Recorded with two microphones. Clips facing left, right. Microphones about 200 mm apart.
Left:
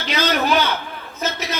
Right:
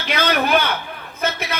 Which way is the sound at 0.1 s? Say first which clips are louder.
Right 1 dB; 55° right (ahead or behind).